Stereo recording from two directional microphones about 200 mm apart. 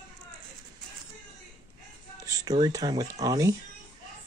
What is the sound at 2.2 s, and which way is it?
Speech, 20° right (ahead or behind).